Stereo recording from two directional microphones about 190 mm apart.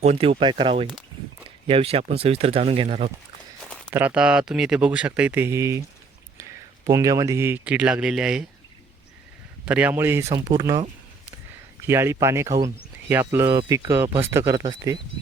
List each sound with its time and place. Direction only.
0.0 s speech: 35° right (ahead or behind)
3.8 s speech: 10° right (ahead or behind)
6.8 s speech: 15° right (ahead or behind)
9.6 s speech: 5° right (ahead or behind)
11.9 s speech: 15° right (ahead or behind)